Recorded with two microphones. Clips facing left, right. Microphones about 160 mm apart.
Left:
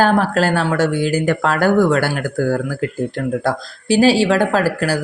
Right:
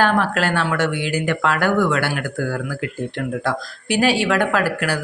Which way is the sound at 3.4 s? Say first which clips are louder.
Left 5 dB; 30° left (ahead or behind).